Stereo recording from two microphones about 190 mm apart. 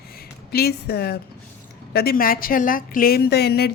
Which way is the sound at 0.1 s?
55° left (ahead or behind).